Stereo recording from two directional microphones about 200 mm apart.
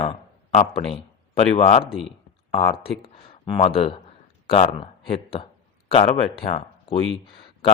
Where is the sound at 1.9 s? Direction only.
Centre (ahead or behind).